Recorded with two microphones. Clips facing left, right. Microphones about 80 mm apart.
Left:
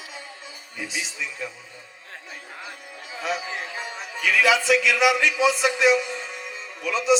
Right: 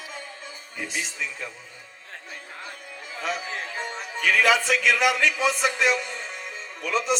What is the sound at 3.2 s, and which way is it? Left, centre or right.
A man's voice, right.